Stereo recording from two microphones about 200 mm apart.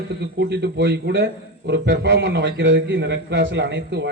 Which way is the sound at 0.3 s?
60° right (ahead or behind).